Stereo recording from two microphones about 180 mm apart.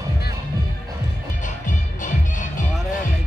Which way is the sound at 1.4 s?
45° left (ahead or behind).